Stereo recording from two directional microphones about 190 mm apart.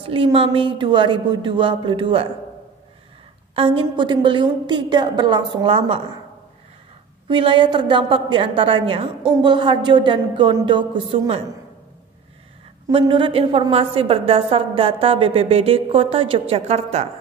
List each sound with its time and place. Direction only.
0.0 s a woman's voice: 30° right (ahead or behind)
3.5 s a woman's voice: 25° right (ahead or behind)
7.2 s a woman's voice: 25° right (ahead or behind)
12.8 s a woman's voice: 25° right (ahead or behind)